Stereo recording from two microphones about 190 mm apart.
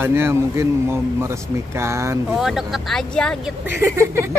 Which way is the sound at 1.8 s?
15° right (ahead or behind).